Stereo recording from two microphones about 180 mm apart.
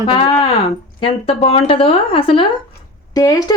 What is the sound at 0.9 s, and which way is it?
A woman's voice, 30° left (ahead or behind).